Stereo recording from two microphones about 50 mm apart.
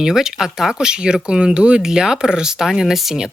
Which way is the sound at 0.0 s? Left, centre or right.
Centre.